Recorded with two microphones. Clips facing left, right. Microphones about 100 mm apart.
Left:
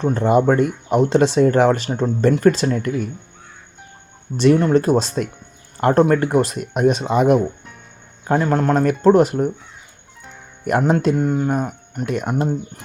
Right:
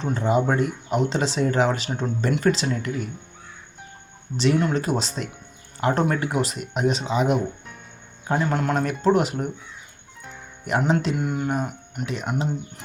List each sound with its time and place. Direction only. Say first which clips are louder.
0.0 s speech: left 6 dB; 55° left (ahead or behind)
4.4 s speech: left 7 dB; 50° left (ahead or behind)
10.7 s speech: left 5 dB; 50° left (ahead or behind)